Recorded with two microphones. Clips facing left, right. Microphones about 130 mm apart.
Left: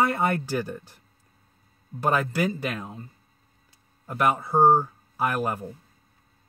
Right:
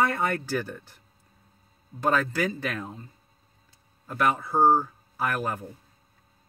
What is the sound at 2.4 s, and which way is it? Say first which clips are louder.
Speech: left 2 dB; 20° left (ahead or behind).